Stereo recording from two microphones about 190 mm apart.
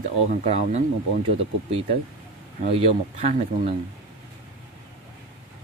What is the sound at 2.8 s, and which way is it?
Speech, 35° right (ahead or behind).